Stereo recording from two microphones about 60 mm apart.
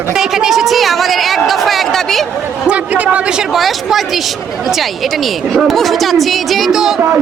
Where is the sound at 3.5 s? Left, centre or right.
Centre.